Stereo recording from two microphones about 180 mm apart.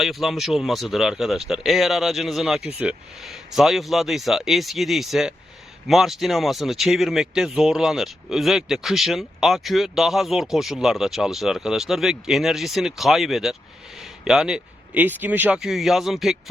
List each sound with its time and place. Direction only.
0.0 s speech: centre (ahead or behind)